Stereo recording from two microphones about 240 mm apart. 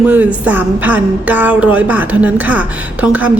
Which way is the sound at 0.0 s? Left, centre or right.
Centre.